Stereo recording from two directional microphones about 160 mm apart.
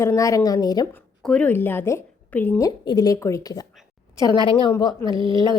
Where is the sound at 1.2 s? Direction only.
10° left (ahead or behind).